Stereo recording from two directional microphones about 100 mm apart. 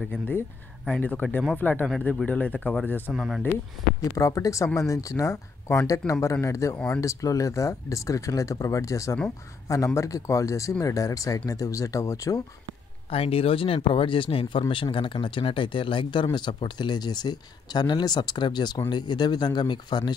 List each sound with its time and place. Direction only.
0.1 s speech: 20° left (ahead or behind)
3.1 s speech: 5° right (ahead or behind)
4.0 s speech: 35° left (ahead or behind)
13.1 s speech: 75° left (ahead or behind); by 20.1 s 45° left (ahead or behind)